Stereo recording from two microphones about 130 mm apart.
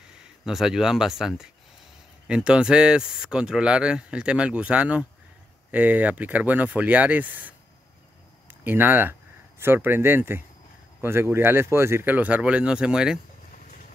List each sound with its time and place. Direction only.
0.5 s speech: 5° right (ahead or behind)